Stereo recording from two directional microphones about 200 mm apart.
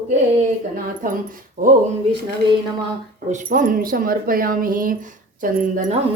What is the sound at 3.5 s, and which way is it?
Speech, 45° right (ahead or behind).